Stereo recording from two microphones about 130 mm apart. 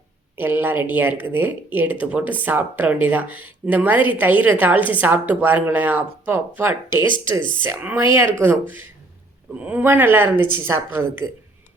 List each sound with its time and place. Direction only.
0.3 s speech: 15° right (ahead or behind)